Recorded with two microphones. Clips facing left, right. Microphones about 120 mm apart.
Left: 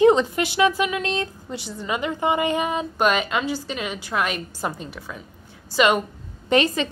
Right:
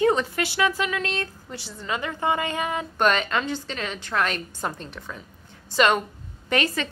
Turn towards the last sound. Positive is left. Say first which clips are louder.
# left 5 dB
turn(degrees=20)  # may be behind; listen again after turning